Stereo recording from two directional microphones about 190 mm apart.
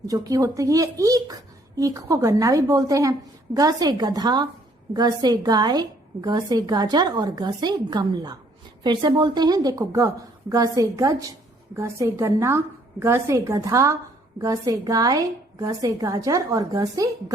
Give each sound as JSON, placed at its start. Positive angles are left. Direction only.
{"t": 0.1, "sound": "a woman's voice", "side_deg": -20}